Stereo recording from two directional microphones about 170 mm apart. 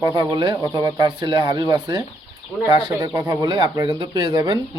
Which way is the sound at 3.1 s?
25° right (ahead or behind).